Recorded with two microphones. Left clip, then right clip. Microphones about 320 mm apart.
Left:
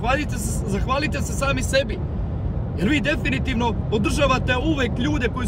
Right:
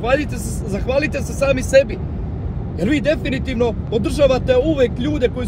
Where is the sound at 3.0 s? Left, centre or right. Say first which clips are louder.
Right 4 dB; left.